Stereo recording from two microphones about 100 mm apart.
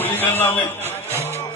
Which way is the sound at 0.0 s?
20° left (ahead or behind).